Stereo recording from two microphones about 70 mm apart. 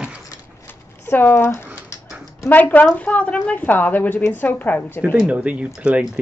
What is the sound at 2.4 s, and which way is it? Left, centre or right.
Speech, left.